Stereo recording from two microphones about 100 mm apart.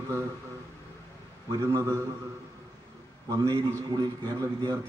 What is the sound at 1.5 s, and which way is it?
Speech, 25° right (ahead or behind).